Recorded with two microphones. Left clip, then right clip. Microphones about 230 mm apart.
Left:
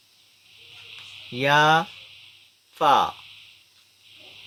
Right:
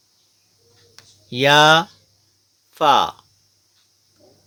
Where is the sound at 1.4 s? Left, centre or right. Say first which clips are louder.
Right 6 dB; right.